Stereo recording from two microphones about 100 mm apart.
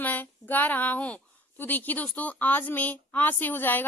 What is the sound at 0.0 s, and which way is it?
A woman's voice, 20° left (ahead or behind).